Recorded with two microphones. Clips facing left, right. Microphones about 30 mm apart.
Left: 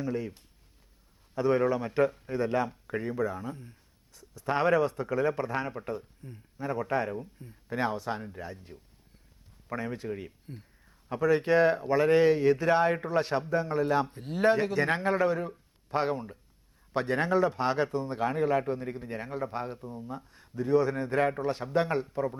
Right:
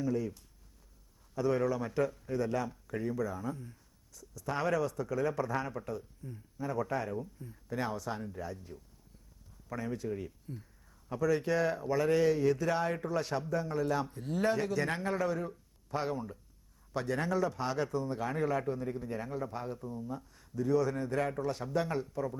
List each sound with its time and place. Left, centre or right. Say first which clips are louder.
0.0 s speech: even; left